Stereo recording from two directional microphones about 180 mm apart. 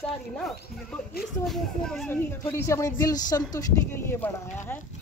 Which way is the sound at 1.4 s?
Centre (ahead or behind).